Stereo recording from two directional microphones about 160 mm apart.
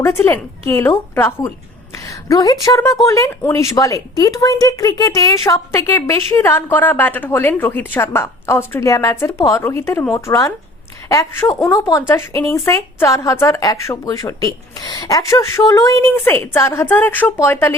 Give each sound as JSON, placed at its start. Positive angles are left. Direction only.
{"t": 0.0, "sound": "a woman's voice", "side_deg": 15}